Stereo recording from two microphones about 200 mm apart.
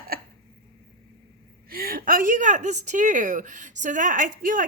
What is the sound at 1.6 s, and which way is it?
A woman's voice, 45° right (ahead or behind).